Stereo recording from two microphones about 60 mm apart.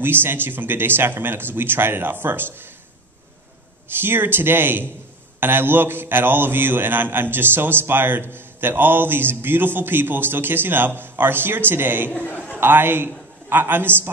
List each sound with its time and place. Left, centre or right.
0.0 s a man's voice: right
4.0 s a man's voice: right